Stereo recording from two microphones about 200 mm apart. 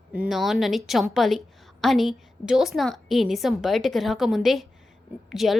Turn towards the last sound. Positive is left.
turn(degrees=0)  # may be behind; listen again after turning